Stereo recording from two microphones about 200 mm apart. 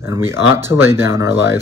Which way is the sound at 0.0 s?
15° right (ahead or behind).